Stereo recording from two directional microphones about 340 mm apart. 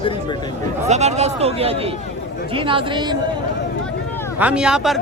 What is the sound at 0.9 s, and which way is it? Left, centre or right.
Speech, centre.